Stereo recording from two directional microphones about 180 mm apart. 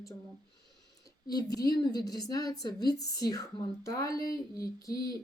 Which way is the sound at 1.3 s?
20° left (ahead or behind).